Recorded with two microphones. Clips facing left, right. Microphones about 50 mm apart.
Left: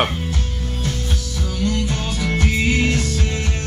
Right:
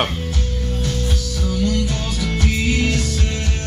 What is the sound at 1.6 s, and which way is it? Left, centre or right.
Music, left.